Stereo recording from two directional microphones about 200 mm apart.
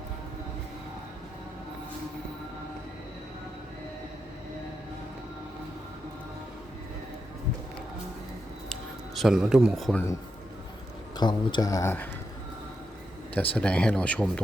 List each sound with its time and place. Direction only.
8.7 s music: centre (ahead or behind)
11.2 s speech: 20° left (ahead or behind)
13.3 s speech: 10° left (ahead or behind)